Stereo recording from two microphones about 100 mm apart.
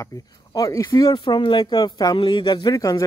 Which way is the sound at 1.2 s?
55° left (ahead or behind).